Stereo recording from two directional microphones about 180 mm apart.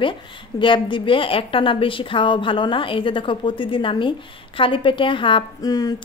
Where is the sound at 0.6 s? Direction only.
25° left (ahead or behind).